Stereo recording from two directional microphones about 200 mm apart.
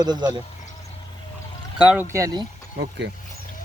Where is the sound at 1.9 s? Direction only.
10° right (ahead or behind).